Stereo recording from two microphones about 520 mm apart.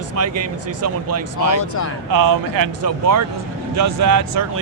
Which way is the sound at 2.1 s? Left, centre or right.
Right.